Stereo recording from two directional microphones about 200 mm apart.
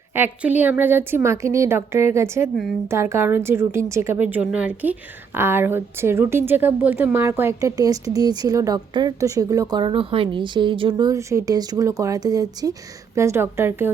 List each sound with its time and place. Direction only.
0.1 s a woman's voice: 10° right (ahead or behind)